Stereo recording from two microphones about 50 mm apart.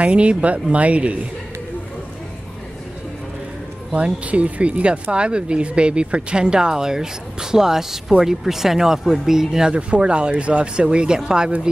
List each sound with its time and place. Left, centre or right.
0.0 s speech: right
3.9 s speech: right; by 9.8 s centre
9.8 s speech: right